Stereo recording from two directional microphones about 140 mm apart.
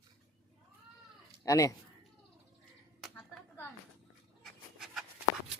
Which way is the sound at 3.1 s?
10° left (ahead or behind).